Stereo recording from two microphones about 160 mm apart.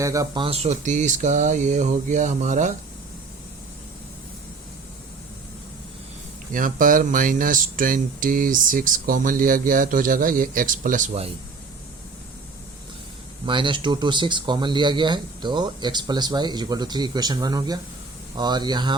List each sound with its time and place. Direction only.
0.0 s speech: 20° right (ahead or behind)
0.4 s speech: 40° right (ahead or behind)
6.5 s speech: 55° right (ahead or behind)
13.4 s speech: 30° right (ahead or behind)